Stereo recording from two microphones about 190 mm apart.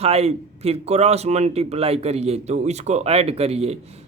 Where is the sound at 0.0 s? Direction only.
35° right (ahead or behind).